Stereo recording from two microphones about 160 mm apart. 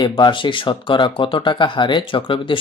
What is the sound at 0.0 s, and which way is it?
Speech, 30° left (ahead or behind).